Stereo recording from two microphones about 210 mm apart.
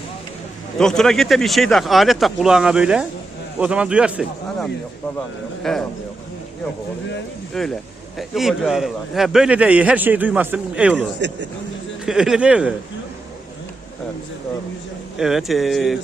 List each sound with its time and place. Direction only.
0.8 s a man's voice: centre (ahead or behind)
7.6 s a man's voice: centre (ahead or behind)
11.2 s a man's voice: 55° right (ahead or behind)
12.0 s a man's voice: centre (ahead or behind)
15.2 s a man's voice: centre (ahead or behind)